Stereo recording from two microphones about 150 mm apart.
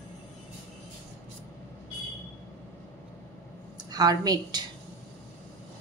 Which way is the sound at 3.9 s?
25° right (ahead or behind).